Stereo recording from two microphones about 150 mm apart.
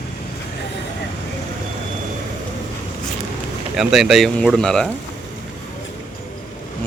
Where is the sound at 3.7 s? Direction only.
5° right (ahead or behind).